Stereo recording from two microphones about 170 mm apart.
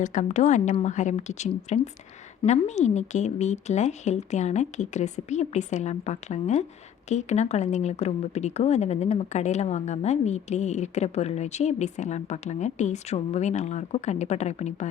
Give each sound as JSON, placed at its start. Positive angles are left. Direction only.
{"t": 0.0, "sound": "speech", "side_deg": 45}